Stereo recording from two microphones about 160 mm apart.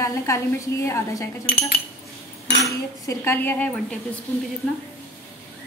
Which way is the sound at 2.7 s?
15° left (ahead or behind).